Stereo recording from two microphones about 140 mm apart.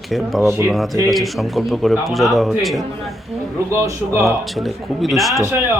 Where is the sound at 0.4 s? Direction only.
20° right (ahead or behind).